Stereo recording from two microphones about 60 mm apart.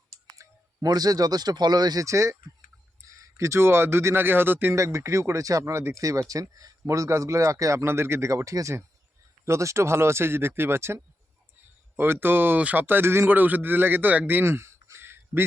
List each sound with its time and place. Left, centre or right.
0.3 s speech: right
4.7 s speech: right
7.9 s speech: right
8.3 s speech: right
11.9 s a man's voice: right
12.5 s speech: right
12.8 s a man's voice: right
14.5 s a sound: right